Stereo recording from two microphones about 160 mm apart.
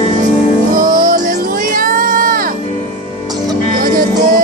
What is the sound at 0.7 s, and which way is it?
Music, 55° right (ahead or behind).